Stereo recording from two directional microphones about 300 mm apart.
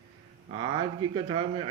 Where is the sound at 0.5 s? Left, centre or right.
Centre.